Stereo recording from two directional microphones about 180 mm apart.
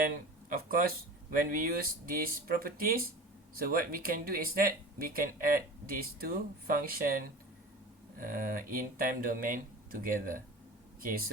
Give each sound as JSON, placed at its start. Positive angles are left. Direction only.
{"t": 0.5, "sound": "speech", "side_deg": -55}